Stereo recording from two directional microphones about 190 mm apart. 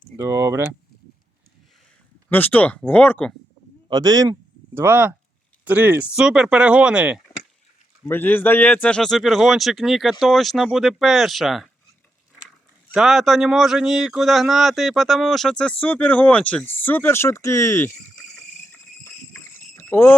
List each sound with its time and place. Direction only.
0.2 s speech: 15° right (ahead or behind)
2.3 s speech: 10° left (ahead or behind)
3.8 s speech: 20° right (ahead or behind)
8.0 s speech: 10° left (ahead or behind)
12.9 s speech: centre (ahead or behind)
18.7 s a sound: 10° left (ahead or behind)